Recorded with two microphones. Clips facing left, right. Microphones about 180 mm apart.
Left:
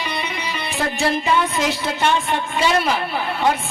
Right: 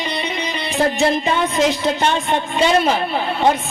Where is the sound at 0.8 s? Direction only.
20° right (ahead or behind).